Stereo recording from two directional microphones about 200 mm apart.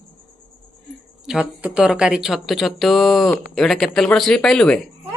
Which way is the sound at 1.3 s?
5° right (ahead or behind).